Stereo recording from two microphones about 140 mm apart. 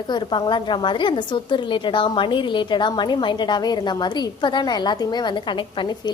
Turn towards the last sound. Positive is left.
turn(degrees=35)  # may be behind; listen again after turning